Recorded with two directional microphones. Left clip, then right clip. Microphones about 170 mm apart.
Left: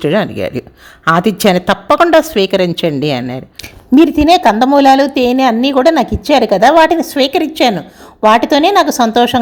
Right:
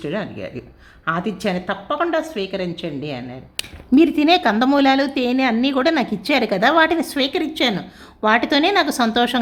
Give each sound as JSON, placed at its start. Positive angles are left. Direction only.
{"t": 0.0, "sound": "a woman's voice", "side_deg": 45}
{"t": 3.9, "sound": "a woman's voice", "side_deg": 15}